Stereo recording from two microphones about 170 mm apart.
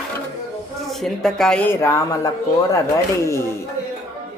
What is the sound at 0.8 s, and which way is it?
A woman's voice, centre (ahead or behind).